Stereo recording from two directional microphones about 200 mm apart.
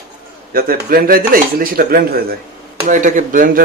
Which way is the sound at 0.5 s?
45° right (ahead or behind).